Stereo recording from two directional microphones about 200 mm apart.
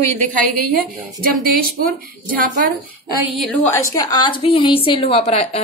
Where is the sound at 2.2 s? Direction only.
45° right (ahead or behind).